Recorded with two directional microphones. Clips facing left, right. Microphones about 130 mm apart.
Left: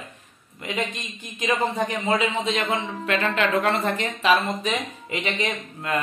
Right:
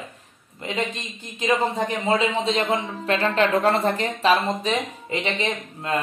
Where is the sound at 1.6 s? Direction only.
Centre (ahead or behind).